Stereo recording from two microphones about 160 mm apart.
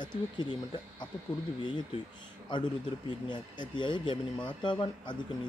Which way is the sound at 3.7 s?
30° left (ahead or behind).